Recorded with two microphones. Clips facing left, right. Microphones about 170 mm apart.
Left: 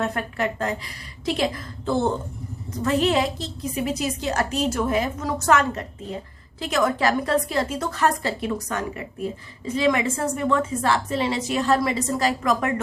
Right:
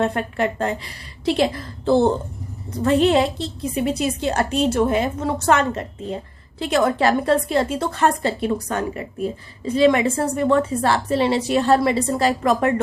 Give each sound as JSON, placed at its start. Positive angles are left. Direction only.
{"t": 0.0, "sound": "a woman's voice", "side_deg": -30}